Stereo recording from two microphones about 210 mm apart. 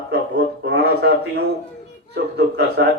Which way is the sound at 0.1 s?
50° right (ahead or behind).